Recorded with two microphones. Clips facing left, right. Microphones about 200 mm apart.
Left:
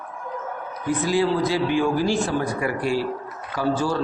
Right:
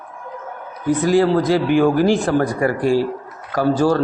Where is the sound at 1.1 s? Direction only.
45° right (ahead or behind).